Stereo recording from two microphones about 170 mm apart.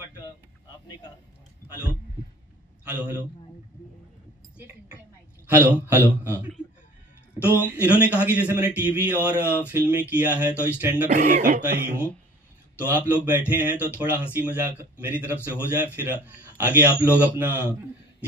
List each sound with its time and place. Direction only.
2.8 s a man's voice: 10° right (ahead or behind)
5.5 s a man's voice: 10° right (ahead or behind)
7.6 s a man's voice: 10° right (ahead or behind)
11.1 s speech: 50° right (ahead or behind)
12.7 s a man's voice: 10° right (ahead or behind)